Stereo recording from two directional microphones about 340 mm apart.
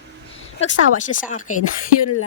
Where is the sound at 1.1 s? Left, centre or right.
Left.